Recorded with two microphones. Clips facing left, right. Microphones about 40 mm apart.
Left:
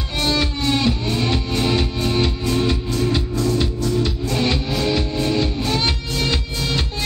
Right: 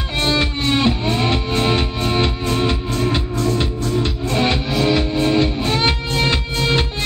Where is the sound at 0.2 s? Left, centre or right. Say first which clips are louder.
Right 2 dB; right.